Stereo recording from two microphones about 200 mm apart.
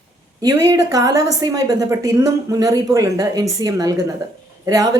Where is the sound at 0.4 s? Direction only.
15° right (ahead or behind).